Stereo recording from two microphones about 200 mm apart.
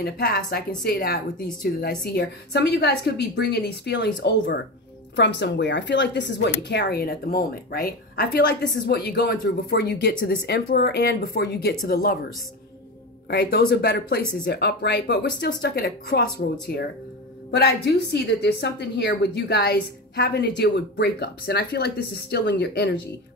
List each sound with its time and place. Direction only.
0.0 s a woman's voice: 50° left (ahead or behind)
13.3 s a woman's voice: 50° left (ahead or behind)